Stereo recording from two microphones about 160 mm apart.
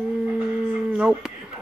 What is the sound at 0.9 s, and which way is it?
Speech, 5° right (ahead or behind).